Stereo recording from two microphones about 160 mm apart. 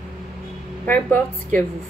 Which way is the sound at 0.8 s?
10° left (ahead or behind).